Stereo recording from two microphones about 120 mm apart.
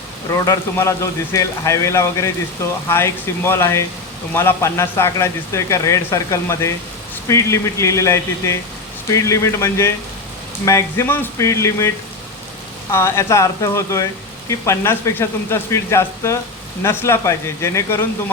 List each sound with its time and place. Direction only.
0.3 s speech: 25° left (ahead or behind)
12.9 s speech: 20° left (ahead or behind)